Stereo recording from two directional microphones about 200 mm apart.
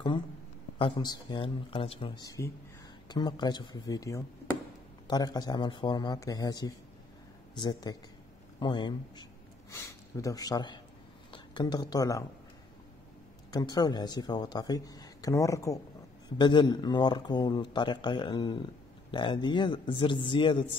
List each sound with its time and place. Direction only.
0.7 s speech: 25° left (ahead or behind)
13.5 s speech: 20° left (ahead or behind)